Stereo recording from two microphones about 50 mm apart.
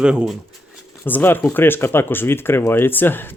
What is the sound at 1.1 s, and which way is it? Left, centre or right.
Speech, left.